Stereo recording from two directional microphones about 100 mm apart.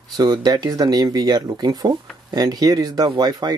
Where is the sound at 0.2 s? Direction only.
40° right (ahead or behind).